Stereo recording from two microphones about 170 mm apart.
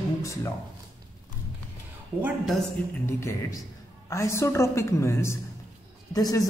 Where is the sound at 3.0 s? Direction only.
15° left (ahead or behind).